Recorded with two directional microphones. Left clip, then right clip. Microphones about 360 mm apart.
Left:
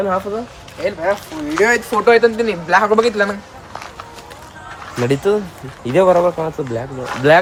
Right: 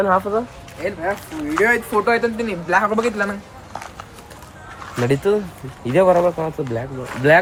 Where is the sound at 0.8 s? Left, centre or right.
Centre; by 3.3 s left.